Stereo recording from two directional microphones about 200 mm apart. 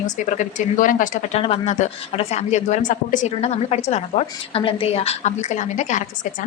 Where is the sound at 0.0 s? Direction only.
40° left (ahead or behind).